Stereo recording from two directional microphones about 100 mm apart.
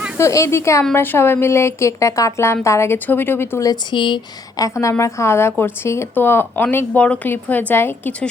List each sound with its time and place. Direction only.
0.2 s a woman's voice: 30° left (ahead or behind)
3.9 s speech: 50° left (ahead or behind)
4.5 s a woman's voice: 35° left (ahead or behind)